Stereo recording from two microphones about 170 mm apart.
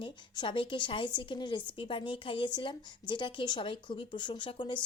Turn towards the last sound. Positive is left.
turn(degrees=30)  # may be behind; listen again after turning